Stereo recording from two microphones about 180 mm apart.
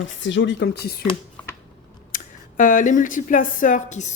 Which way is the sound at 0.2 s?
90° left.